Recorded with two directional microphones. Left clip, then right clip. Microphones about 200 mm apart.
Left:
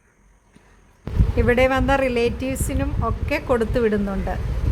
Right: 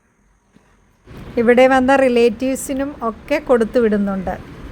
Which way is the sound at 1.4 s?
15° right (ahead or behind).